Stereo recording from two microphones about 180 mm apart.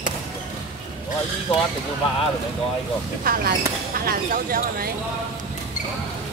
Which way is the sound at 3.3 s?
55° right (ahead or behind).